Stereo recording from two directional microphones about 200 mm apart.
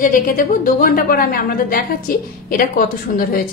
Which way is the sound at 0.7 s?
45° left (ahead or behind).